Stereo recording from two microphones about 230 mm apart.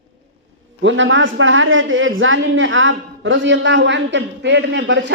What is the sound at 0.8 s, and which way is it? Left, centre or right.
A woman's voice, right.